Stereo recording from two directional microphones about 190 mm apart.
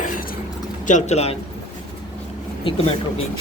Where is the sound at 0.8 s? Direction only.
40° left (ahead or behind).